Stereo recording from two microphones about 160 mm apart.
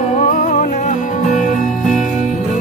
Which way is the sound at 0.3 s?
55° left (ahead or behind).